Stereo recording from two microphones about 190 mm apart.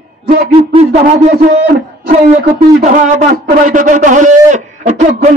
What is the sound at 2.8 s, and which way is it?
A man's voice, 40° right (ahead or behind).